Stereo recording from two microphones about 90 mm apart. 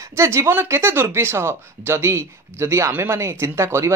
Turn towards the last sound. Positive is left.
turn(degrees=-30)  # may be behind; listen again after turning